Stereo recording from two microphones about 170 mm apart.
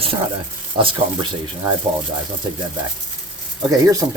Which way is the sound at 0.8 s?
30° right (ahead or behind).